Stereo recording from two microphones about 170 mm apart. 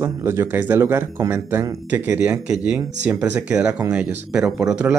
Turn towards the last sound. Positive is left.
turn(degrees=-5)  # may be behind; listen again after turning